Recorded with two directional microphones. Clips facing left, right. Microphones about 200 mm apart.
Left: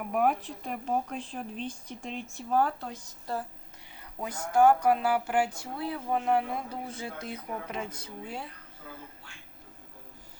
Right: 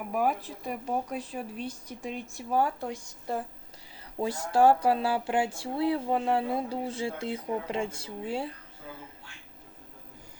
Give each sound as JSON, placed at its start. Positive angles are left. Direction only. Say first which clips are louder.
{"t": 0.1, "sound": "speech", "louder": "left 1 dB", "side_deg": 0}
{"t": 4.2, "sound": "speech", "louder": "right 1 dB", "side_deg": -30}